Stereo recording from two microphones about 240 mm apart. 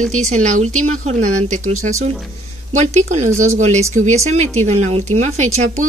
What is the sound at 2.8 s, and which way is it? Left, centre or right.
Speech, right.